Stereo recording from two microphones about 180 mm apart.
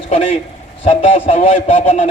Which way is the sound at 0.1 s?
40° left (ahead or behind).